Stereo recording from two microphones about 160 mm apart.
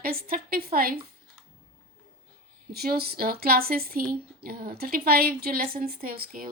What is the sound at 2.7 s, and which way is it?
A woman's voice, 75° right (ahead or behind).